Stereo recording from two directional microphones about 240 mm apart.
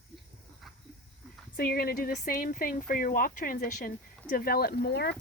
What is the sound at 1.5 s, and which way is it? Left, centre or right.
Speech, left.